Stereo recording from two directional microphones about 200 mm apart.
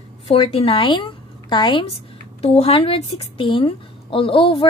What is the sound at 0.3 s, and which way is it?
A woman's voice, 30° left (ahead or behind).